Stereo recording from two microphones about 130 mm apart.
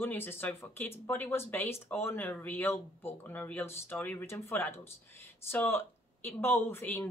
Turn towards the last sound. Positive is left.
turn(degrees=15)  # may be behind; listen again after turning